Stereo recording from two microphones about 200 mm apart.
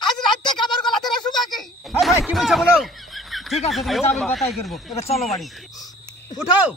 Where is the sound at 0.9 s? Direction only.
Centre (ahead or behind).